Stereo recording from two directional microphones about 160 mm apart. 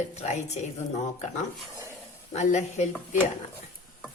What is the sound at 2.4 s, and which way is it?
Speech, 45° left (ahead or behind).